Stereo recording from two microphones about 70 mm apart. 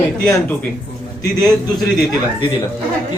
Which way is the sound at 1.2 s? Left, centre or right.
Left.